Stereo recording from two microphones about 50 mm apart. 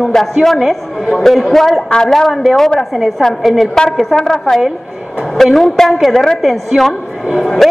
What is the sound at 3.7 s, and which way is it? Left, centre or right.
A woman's voice, centre.